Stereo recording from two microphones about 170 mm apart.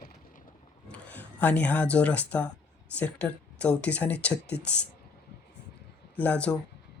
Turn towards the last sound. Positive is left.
turn(degrees=10)  # may be behind; listen again after turning